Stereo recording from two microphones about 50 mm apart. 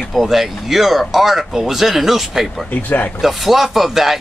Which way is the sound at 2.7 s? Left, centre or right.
Left.